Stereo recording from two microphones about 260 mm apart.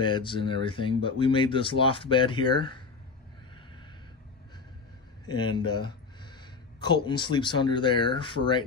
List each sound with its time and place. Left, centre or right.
0.0 s speech: centre
5.2 s speech: centre